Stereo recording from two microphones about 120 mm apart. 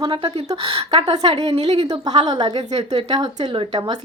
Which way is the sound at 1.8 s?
35° right (ahead or behind).